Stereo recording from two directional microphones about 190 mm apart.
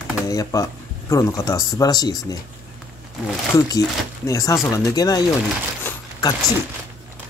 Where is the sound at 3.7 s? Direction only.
15° left (ahead or behind).